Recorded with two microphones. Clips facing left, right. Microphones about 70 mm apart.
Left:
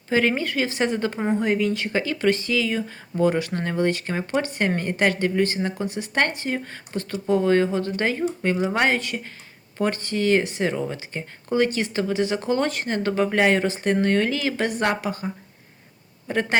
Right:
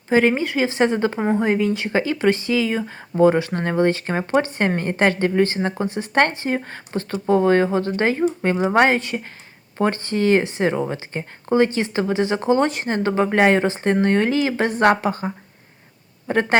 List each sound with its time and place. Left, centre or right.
0.1 s speech: right
4.4 s speech: right
16.3 s speech: right